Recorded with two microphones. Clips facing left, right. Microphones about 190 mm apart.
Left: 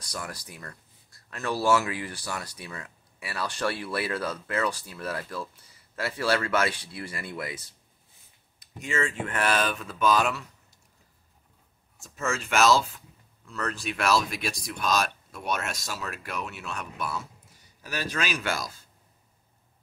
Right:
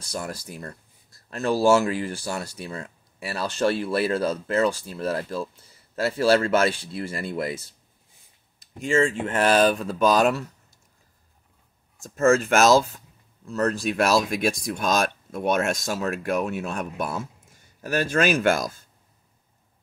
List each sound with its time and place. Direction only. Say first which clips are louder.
0.0 s speech: right 6 dB; 25° right (ahead or behind)
8.7 s speech: right 8 dB; 30° right (ahead or behind)
12.0 s speech: right 12 dB; 45° right (ahead or behind)